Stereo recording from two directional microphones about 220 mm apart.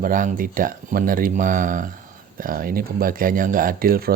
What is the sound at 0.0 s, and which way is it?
Speech, 40° right (ahead or behind).